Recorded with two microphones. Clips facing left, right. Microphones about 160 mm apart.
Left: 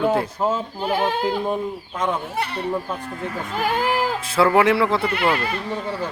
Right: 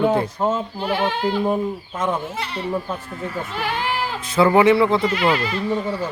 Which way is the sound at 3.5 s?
45° left (ahead or behind).